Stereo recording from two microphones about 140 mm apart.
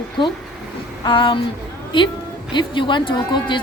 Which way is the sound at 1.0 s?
35° left (ahead or behind).